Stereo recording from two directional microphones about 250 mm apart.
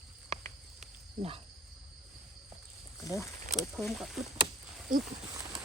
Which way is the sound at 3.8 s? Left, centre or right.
Centre.